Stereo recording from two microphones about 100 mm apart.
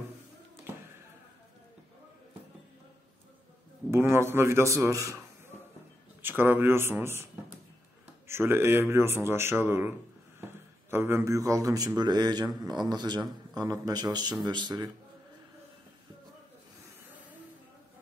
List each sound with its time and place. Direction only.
3.9 s a man's voice: 25° right (ahead or behind)
6.2 s a man's voice: 20° right (ahead or behind)
8.3 s a man's voice: 25° right (ahead or behind); by 14.9 s 45° right (ahead or behind)